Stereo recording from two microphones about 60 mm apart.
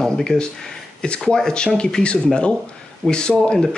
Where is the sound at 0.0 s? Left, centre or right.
Centre.